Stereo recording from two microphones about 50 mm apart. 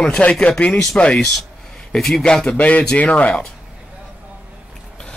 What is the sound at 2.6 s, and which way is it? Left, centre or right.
Speech, left.